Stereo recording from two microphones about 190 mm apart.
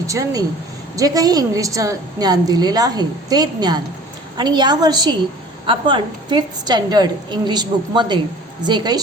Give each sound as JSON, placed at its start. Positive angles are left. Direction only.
{"t": 0.1, "sound": "a woman's voice", "side_deg": -15}